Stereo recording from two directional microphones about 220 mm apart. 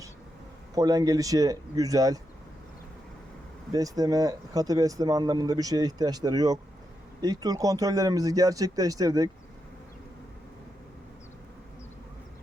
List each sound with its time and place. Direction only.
0.8 s speech: 15° right (ahead or behind)
3.7 s speech: 15° right (ahead or behind)